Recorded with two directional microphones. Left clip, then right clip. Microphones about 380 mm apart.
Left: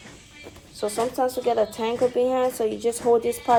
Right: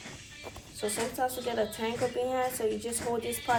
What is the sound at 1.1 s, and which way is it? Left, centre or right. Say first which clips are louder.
A woman's voice: left 10 dB; centre.